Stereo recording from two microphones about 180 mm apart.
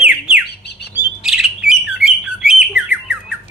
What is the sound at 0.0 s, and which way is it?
Bird, 5° right (ahead or behind).